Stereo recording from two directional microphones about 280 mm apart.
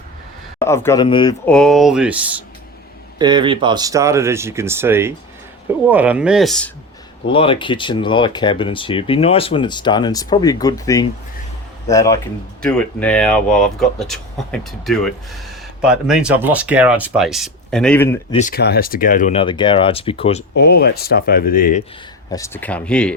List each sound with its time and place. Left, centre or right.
0.6 s speech: centre
1.5 s speech: centre
3.2 s speech: centre
7.3 s speech: centre
18.3 s speech: left
20.6 s speech: left
22.3 s speech: centre